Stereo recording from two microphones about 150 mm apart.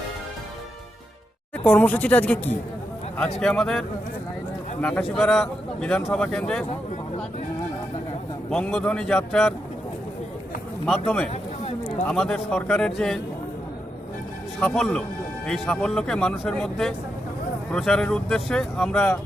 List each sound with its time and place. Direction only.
1.5 s speech: 10° left (ahead or behind)
8.4 s speech: 5° left (ahead or behind)
10.8 s speech: 10° left (ahead or behind)
14.6 s speech: 5° left (ahead or behind)